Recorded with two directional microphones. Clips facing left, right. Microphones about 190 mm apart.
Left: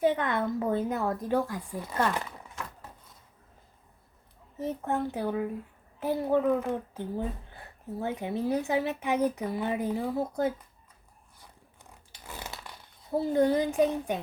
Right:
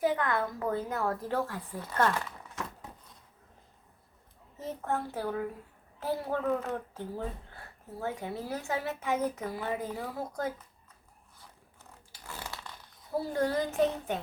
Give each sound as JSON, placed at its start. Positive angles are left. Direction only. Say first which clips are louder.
{"t": 0.0, "sound": "a woman's voice", "louder": "left 3 dB", "side_deg": 20}
{"t": 4.9, "sound": "a woman's voice", "louder": "left 2 dB", "side_deg": 20}
{"t": 11.8, "sound": "a sound", "louder": "left 1 dB", "side_deg": 20}